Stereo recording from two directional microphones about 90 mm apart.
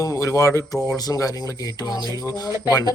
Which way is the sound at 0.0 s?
35° left (ahead or behind).